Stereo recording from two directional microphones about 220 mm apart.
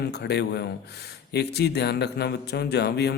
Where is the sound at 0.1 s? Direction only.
50° left (ahead or behind).